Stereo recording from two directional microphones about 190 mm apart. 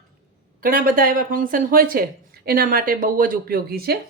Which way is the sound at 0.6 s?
50° right (ahead or behind).